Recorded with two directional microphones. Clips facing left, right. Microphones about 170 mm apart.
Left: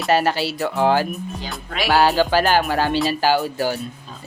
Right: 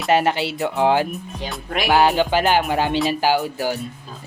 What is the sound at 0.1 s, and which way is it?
Speech, 20° right (ahead or behind).